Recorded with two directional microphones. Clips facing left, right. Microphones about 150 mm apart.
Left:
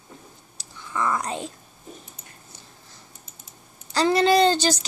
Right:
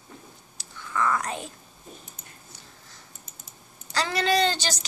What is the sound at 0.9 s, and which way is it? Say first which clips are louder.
Speech: left 1 dB; 20° left (ahead or behind).